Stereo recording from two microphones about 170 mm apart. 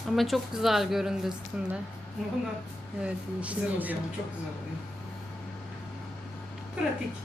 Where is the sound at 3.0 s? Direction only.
5° right (ahead or behind).